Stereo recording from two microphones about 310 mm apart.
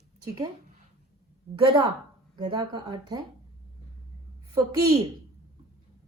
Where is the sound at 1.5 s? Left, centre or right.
Centre.